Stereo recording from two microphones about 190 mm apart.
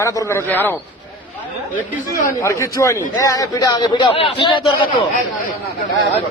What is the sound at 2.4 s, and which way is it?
A man's voice, 15° left (ahead or behind).